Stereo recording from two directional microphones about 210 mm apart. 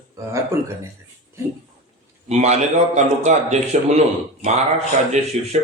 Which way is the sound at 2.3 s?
30° right (ahead or behind).